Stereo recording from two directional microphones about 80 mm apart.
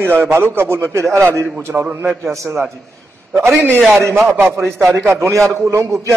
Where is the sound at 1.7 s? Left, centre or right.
Centre.